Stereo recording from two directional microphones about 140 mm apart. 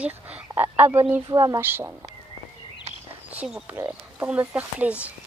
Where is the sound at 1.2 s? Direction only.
30° right (ahead or behind).